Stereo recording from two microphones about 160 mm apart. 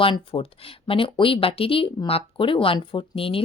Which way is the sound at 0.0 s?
35° left (ahead or behind).